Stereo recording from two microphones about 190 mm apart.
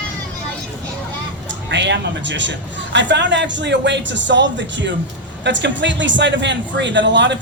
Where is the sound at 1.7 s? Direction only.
70° right (ahead or behind).